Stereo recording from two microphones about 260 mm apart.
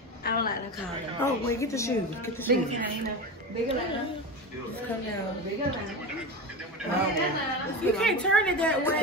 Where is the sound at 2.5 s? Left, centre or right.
Right.